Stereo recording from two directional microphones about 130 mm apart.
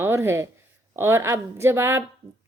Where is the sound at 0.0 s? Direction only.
20° right (ahead or behind).